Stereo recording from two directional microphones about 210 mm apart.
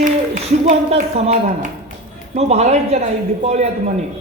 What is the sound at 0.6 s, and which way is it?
A woman's voice, 30° right (ahead or behind).